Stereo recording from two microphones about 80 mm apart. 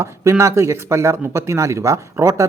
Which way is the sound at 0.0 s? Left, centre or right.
Right.